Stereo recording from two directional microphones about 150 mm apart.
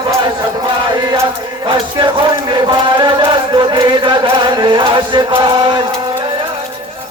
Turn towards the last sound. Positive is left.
turn(degrees=-30)  # may be behind; listen again after turning